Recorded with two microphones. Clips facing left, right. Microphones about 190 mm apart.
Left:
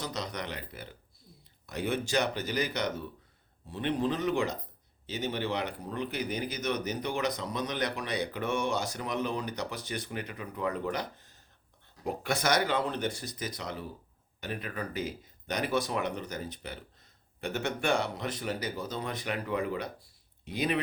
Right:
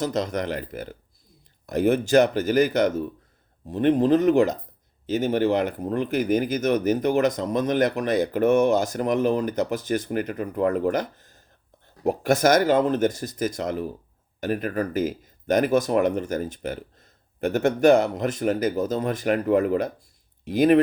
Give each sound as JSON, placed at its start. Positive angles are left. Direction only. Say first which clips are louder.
{"t": 0.0, "sound": "speech", "louder": "right 11 dB", "side_deg": -50}